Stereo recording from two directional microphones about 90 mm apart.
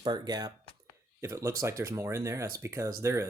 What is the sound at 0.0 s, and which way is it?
Speech, 50° right (ahead or behind).